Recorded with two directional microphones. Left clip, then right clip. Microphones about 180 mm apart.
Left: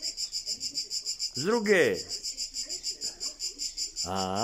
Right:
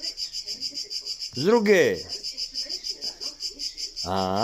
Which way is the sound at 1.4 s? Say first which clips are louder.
Right 6 dB; centre (ahead or behind).